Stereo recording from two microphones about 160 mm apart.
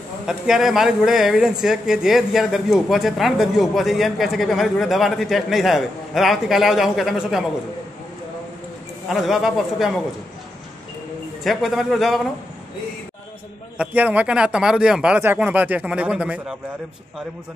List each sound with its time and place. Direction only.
0.3 s speech: 5° right (ahead or behind)
9.1 s speech: centre (ahead or behind)
11.4 s speech: centre (ahead or behind)
13.7 s speech: 10° right (ahead or behind)